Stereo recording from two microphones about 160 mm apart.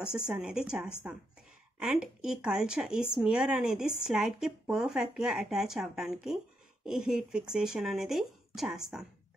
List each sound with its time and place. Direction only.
0.0 s speech: 5° right (ahead or behind)